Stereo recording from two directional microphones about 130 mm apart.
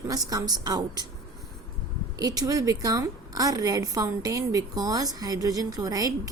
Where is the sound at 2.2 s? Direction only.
30° right (ahead or behind).